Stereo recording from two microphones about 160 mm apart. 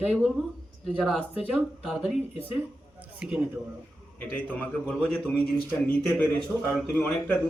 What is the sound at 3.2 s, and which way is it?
Speech, 5° right (ahead or behind).